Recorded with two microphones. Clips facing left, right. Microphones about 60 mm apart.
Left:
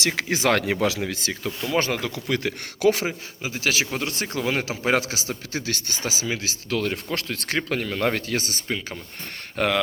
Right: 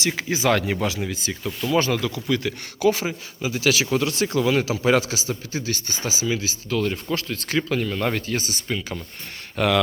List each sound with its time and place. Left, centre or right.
0.0 s speech: left
1.5 s speech: left
3.4 s a man's voice: left
5.5 s speech: left
6.1 s speech: left
9.6 s speech: left